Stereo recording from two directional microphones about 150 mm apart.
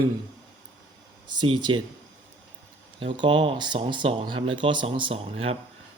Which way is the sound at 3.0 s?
35° right (ahead or behind).